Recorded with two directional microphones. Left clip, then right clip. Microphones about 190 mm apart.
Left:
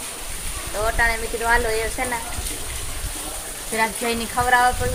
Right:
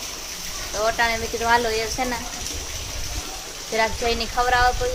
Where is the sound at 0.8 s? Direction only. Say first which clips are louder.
Even; centre (ahead or behind).